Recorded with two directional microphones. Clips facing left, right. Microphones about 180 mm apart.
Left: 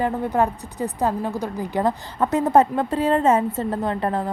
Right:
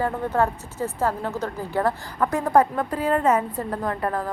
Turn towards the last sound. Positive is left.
turn(degrees=25)  # may be behind; listen again after turning